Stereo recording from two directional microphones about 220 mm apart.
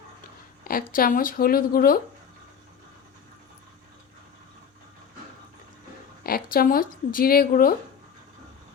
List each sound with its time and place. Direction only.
0.7 s speech: 40° left (ahead or behind)
6.2 s speech: 40° left (ahead or behind)